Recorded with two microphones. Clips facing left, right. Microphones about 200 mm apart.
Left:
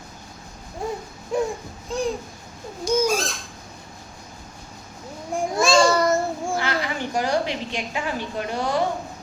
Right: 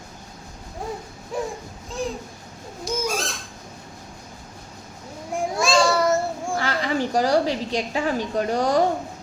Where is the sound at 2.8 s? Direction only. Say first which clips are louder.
Left 7 dB; centre (ahead or behind).